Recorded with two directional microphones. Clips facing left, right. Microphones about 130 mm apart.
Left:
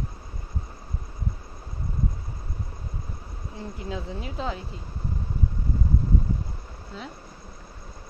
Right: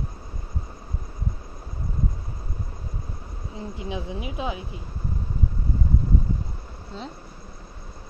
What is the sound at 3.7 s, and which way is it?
Speech, 20° right (ahead or behind).